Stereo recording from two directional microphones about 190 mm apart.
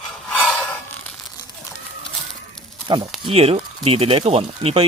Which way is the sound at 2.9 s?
25° right (ahead or behind).